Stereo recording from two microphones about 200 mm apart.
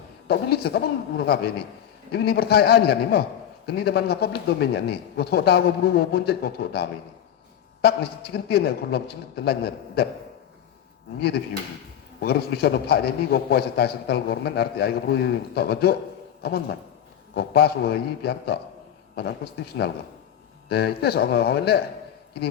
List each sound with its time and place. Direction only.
0.3 s a man's voice: 55° left (ahead or behind)
11.2 s a man's voice: 55° left (ahead or behind)